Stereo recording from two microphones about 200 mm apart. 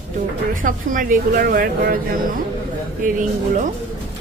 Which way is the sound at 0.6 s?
40° right (ahead or behind).